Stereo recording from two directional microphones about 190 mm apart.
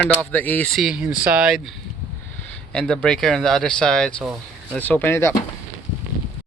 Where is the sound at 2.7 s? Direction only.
5° left (ahead or behind).